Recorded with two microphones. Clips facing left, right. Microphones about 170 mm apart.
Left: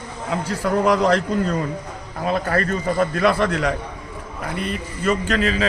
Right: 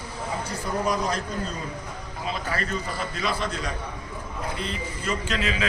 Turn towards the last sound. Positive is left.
turn(degrees=40)  # may be behind; listen again after turning